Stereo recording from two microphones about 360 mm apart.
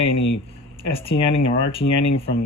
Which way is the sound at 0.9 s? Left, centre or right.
Centre.